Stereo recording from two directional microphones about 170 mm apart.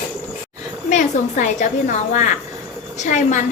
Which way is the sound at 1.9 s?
45° left (ahead or behind).